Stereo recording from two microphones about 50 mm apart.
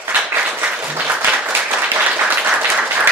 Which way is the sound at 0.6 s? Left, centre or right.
Right.